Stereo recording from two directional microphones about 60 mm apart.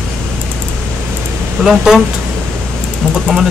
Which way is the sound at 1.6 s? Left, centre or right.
Centre.